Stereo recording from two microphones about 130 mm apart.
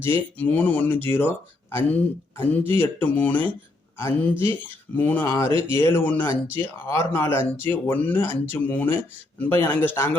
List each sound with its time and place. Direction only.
0.0 s speech: 15° left (ahead or behind)